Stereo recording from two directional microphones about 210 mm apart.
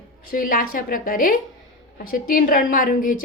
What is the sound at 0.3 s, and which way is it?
A woman's voice, 40° left (ahead or behind).